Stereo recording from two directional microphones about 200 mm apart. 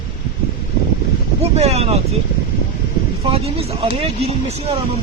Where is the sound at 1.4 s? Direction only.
30° right (ahead or behind).